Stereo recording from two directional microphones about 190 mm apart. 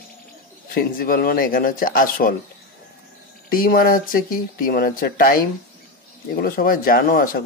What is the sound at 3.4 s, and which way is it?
Speech, 50° left (ahead or behind).